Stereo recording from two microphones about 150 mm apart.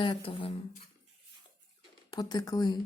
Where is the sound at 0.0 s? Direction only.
35° left (ahead or behind).